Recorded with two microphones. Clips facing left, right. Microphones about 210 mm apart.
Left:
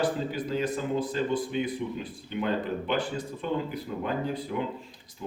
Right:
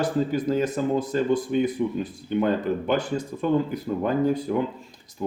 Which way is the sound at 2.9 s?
45° right (ahead or behind).